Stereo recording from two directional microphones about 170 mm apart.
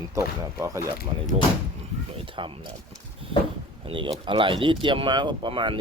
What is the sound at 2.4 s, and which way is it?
Speech, 30° right (ahead or behind).